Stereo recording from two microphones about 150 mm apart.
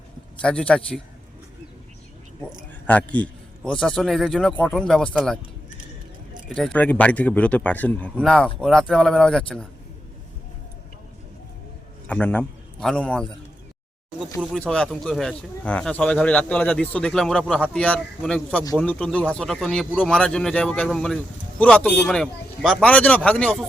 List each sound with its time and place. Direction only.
0.4 s speech: 5° left (ahead or behind)
2.8 s a man's voice: 10° left (ahead or behind)
6.5 s a man's voice: 5° left (ahead or behind)
12.0 s a man's voice: 10° left (ahead or behind)
14.5 s a man's voice: 5° left (ahead or behind)